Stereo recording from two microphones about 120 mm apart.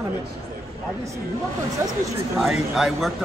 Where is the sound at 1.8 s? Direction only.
25° right (ahead or behind).